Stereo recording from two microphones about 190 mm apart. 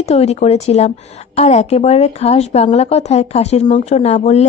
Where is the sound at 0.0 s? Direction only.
35° left (ahead or behind).